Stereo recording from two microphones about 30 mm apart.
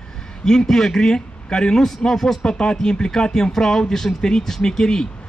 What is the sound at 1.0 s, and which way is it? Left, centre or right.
Speech, left.